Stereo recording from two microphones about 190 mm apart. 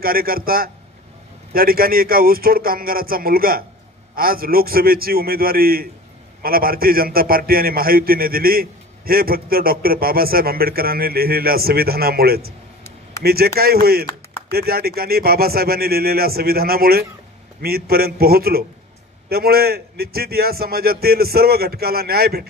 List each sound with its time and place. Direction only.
0.0 s a man's voice: 50° right (ahead or behind)